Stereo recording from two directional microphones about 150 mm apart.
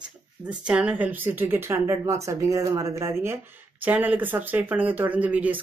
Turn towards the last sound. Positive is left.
turn(degrees=-10)  # may be behind; listen again after turning